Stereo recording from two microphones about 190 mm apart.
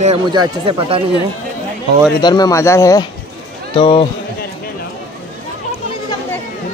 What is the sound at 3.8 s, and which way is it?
Speech, 30° left (ahead or behind).